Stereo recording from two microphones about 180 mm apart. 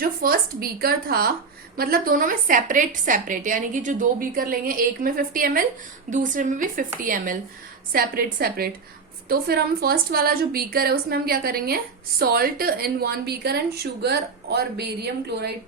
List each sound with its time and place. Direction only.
0.0 s a woman's voice: 50° right (ahead or behind)